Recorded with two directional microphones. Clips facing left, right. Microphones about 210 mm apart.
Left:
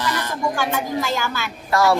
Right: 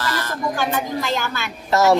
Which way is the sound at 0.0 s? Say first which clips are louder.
Left 1 dB; 20° left (ahead or behind).